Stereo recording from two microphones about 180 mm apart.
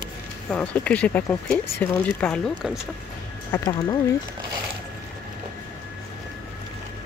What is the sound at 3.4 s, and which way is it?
Speech, 15° left (ahead or behind).